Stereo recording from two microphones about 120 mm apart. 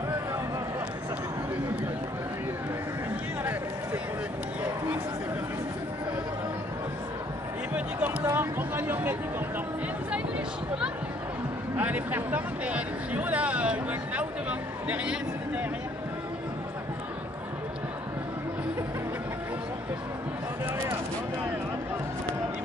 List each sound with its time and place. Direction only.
8.3 s speech: 15° right (ahead or behind)
11.7 s speech: 15° right (ahead or behind)